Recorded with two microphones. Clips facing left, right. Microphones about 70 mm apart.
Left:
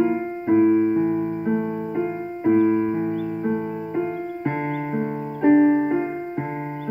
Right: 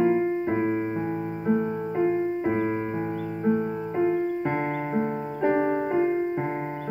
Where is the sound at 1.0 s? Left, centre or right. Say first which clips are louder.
Left 7 dB; centre.